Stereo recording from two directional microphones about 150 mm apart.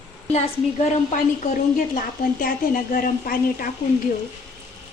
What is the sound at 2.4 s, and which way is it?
A woman's voice, 75° left (ahead or behind).